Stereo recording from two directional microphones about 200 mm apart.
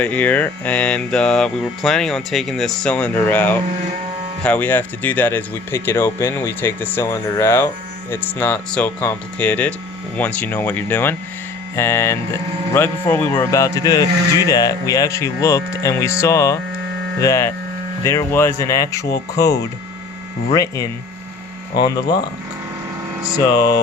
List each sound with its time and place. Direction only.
0.0 s speech: 10° left (ahead or behind)
21.8 s speech: 20° left (ahead or behind)